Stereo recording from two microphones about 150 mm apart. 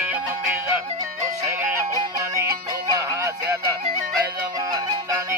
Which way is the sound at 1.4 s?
20° right (ahead or behind).